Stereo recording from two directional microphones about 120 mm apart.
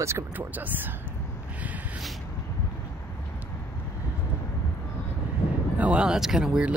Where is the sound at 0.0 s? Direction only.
20° right (ahead or behind).